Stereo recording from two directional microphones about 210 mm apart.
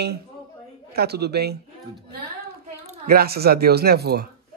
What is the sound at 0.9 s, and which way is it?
Speech, 50° right (ahead or behind).